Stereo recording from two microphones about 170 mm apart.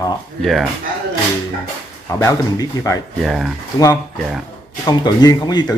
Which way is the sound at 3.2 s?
Centre (ahead or behind).